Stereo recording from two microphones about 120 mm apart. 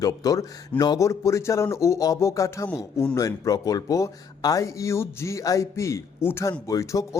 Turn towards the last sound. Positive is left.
turn(degrees=25)  # may be behind; listen again after turning